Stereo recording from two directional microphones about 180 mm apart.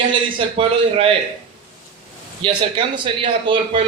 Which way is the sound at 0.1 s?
30° right (ahead or behind).